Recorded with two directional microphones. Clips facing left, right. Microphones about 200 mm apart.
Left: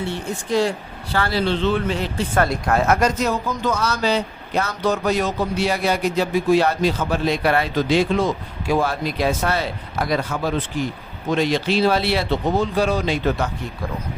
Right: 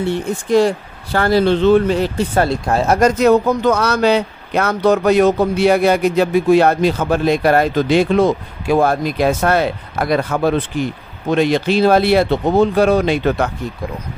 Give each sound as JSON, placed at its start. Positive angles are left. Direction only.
{"t": 1.1, "sound": "speech", "side_deg": -45}
{"t": 2.4, "sound": "speech", "side_deg": -30}
{"t": 3.0, "sound": "speech", "side_deg": -65}